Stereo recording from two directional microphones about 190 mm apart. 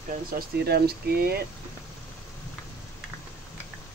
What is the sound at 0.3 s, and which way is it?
Speech, 55° right (ahead or behind).